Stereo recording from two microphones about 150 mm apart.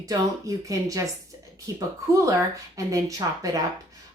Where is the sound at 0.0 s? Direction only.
20° right (ahead or behind).